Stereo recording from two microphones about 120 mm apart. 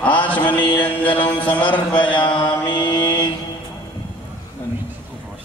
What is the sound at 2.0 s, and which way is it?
Mantra, 40° left (ahead or behind).